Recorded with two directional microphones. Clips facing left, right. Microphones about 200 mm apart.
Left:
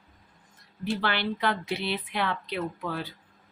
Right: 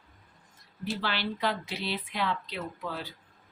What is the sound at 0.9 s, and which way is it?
Speech, 60° left (ahead or behind).